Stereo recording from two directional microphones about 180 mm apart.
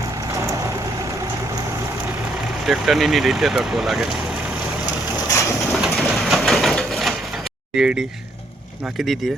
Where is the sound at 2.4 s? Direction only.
Centre (ahead or behind).